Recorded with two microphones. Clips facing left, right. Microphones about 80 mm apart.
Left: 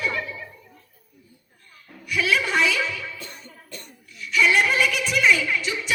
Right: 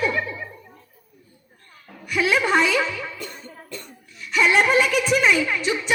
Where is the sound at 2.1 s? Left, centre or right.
Right.